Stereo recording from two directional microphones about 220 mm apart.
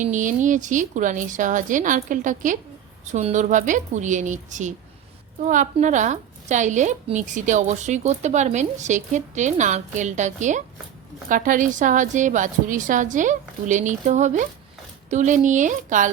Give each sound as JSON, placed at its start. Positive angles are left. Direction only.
{"t": 0.0, "sound": "a woman's voice", "side_deg": -35}